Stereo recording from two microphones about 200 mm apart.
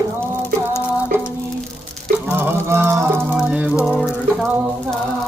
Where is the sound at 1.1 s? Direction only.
10° right (ahead or behind).